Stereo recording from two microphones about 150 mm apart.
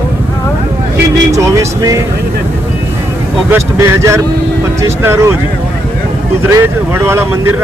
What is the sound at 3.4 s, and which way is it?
Speech, 15° right (ahead or behind).